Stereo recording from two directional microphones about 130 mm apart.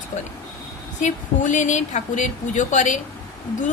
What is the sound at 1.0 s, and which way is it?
Speech, 70° left (ahead or behind).